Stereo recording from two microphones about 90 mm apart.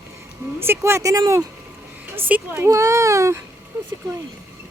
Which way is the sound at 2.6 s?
35° right (ahead or behind).